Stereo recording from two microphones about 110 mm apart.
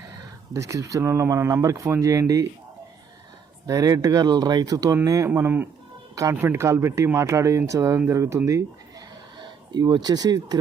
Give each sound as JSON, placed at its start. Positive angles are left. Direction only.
{"t": 0.5, "sound": "speech", "side_deg": -30}
{"t": 3.7, "sound": "speech", "side_deg": -35}
{"t": 5.3, "sound": "speech", "side_deg": -15}
{"t": 9.4, "sound": "speech", "side_deg": -40}